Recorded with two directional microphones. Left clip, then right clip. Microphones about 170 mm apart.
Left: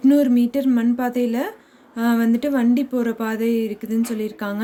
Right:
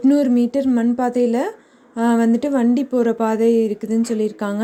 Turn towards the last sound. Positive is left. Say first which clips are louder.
# right 5 dB
turn(degrees=-30)  # may be behind; listen again after turning